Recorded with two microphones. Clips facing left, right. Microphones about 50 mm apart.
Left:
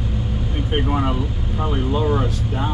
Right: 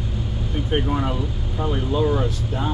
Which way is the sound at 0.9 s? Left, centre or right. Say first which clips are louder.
Left 2 dB; left.